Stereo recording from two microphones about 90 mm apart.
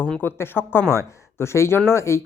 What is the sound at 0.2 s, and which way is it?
Speech, 25° left (ahead or behind).